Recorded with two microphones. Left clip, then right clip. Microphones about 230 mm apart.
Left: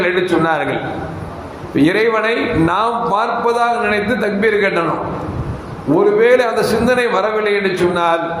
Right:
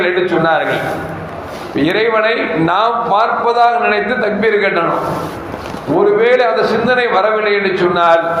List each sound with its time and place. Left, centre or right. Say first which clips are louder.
0.0 s a man's voice: right 2 dB; left
1.7 s a man's voice: right 1 dB; left
6.1 s a man's voice: right 1 dB; left